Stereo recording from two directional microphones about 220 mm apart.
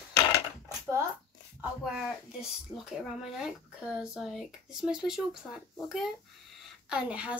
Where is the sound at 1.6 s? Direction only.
Centre (ahead or behind).